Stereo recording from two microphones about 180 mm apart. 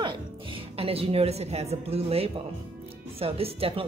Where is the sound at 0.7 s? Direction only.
35° right (ahead or behind).